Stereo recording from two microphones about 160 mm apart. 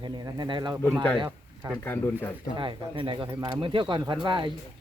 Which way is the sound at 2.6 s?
30° right (ahead or behind).